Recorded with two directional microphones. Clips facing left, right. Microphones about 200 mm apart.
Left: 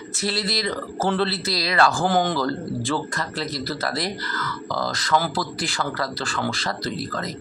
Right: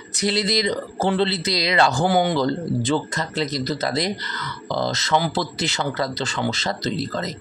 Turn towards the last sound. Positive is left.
turn(degrees=-25)  # may be behind; listen again after turning